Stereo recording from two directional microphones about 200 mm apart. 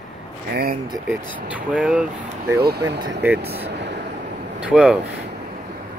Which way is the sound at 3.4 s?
30° right (ahead or behind).